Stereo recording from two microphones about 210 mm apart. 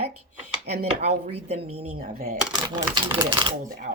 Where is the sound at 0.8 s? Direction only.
30° right (ahead or behind).